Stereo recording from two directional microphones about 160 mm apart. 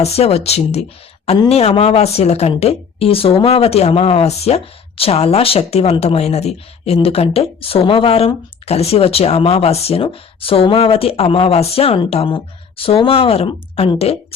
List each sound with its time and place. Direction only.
0.0 s speech: 40° left (ahead or behind)